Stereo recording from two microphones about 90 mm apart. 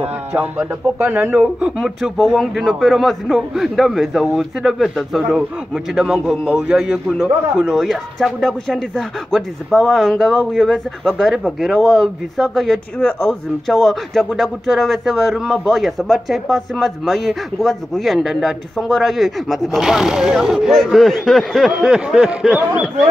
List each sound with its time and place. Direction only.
0.3 s speech: 20° right (ahead or behind)
1.4 s a man's voice: 5° right (ahead or behind)